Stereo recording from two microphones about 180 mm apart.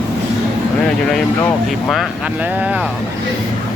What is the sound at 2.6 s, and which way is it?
Speech, 10° right (ahead or behind).